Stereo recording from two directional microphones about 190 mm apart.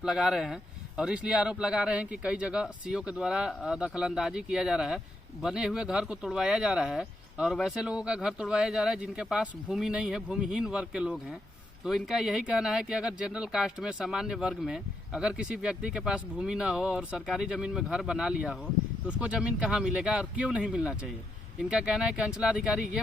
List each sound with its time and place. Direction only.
0.0 s speech: 5° right (ahead or behind)